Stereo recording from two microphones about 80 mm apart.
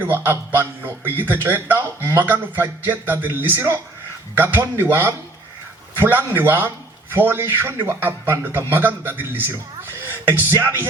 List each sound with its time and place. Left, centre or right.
0.0 s speech: right